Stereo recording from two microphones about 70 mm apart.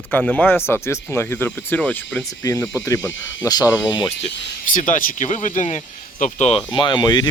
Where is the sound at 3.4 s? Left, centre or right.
Left.